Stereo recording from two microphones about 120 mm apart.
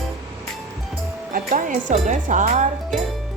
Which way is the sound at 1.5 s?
90° right.